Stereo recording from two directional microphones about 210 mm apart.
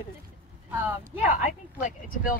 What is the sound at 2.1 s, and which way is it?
Speech, 40° left (ahead or behind).